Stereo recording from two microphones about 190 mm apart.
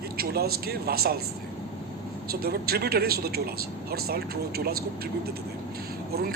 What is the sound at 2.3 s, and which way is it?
Speech, 55° right (ahead or behind).